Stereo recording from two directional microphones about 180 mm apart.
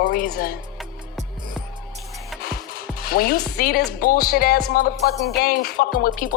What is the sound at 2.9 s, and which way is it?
Speech, 55° left (ahead or behind).